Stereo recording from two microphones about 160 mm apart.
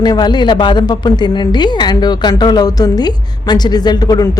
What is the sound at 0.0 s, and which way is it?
A woman's voice, 25° left (ahead or behind).